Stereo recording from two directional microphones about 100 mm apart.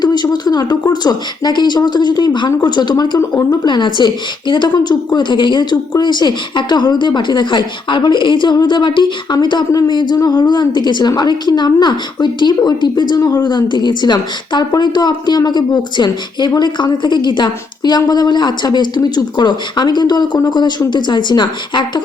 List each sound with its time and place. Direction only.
0.0 s speech: 45° left (ahead or behind)